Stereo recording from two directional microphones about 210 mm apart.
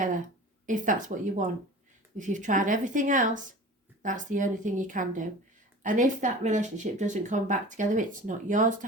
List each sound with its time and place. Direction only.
0.6 s speech: 35° right (ahead or behind)